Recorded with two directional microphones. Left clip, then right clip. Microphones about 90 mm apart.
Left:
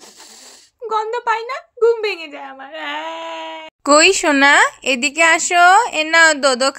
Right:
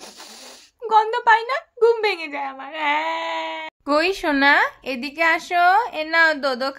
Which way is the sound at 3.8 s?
65° left (ahead or behind).